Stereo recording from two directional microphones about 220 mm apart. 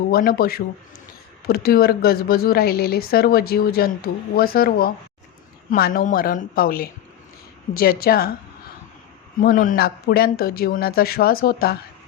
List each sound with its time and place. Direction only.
0.1 s a woman's voice: 40° left (ahead or behind)
9.4 s a woman's voice: 40° left (ahead or behind)